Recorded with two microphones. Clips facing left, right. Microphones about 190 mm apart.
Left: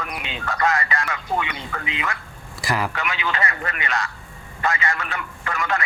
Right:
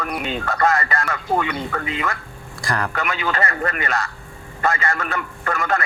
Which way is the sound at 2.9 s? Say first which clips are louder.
Right 3 dB; 45° right (ahead or behind).